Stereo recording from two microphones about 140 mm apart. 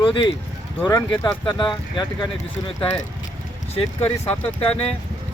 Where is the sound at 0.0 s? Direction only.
35° left (ahead or behind).